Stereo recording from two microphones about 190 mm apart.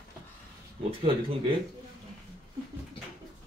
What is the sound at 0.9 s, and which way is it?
Speech, 30° right (ahead or behind).